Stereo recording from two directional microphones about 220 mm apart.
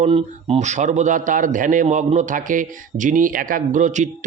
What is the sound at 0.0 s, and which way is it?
A man's voice, 25° right (ahead or behind).